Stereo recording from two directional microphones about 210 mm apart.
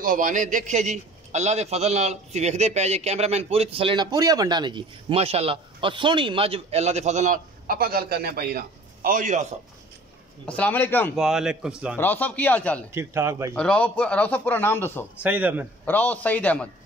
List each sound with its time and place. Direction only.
0.0 s a man's voice: 40° right (ahead or behind)
10.4 s speech: 5° left (ahead or behind)
11.1 s a man's voice: centre (ahead or behind)
12.0 s speech: 10° left (ahead or behind)
12.9 s a man's voice: 15° right (ahead or behind)
13.6 s speech: 5° left (ahead or behind)
15.2 s a man's voice: 10° right (ahead or behind)
15.8 s speech: 10° left (ahead or behind)